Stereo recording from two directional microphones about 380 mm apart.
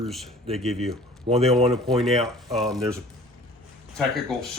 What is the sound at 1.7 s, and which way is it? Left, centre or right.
Speech, centre.